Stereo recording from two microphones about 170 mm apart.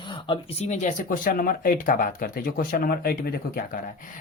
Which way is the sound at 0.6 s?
45° left (ahead or behind).